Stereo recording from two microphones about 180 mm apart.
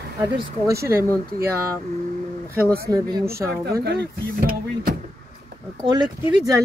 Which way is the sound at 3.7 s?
60° right (ahead or behind).